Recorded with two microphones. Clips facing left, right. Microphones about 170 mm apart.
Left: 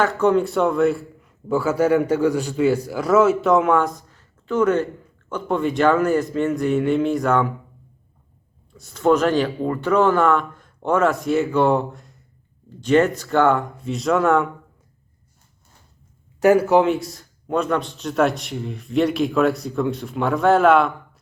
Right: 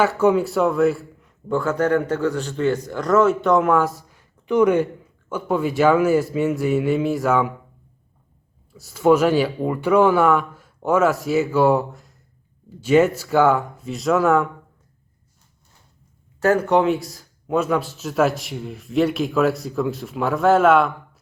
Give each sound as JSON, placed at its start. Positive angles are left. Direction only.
{"t": 0.0, "sound": "a man's voice", "side_deg": -10}
{"t": 8.7, "sound": "a man's voice", "side_deg": -5}
{"t": 16.4, "sound": "a man's voice", "side_deg": 10}